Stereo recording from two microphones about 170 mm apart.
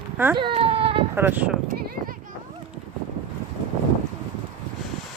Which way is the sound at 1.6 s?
55° right (ahead or behind).